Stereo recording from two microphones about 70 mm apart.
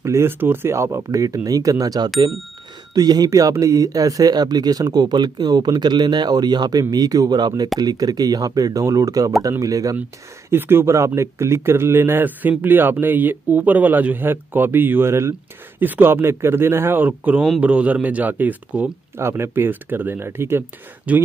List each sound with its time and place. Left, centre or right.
0.0 s speech: right
7.8 s speech: right
10.5 s a man's voice: right
19.1 s speech: right
21.1 s a man's voice: right